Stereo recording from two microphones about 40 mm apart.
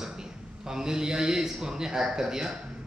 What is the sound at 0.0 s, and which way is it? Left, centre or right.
A man's voice, centre.